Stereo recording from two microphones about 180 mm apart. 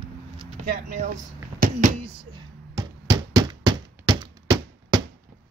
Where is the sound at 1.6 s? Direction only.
40° right (ahead or behind).